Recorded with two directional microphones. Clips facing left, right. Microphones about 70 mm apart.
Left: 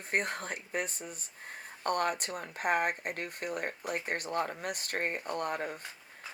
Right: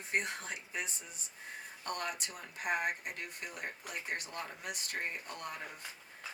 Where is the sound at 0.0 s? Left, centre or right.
Left.